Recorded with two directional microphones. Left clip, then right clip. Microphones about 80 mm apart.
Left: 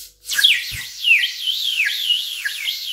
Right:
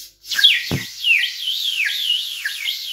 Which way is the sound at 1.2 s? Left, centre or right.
Left.